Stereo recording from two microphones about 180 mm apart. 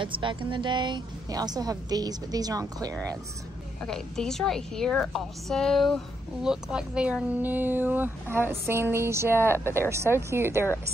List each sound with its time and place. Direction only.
0.0 s a woman's voice: 25° right (ahead or behind)
3.8 s a woman's voice: 5° left (ahead or behind); by 10.7 s 15° right (ahead or behind)